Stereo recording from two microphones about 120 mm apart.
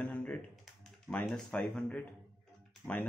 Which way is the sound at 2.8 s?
15° right (ahead or behind).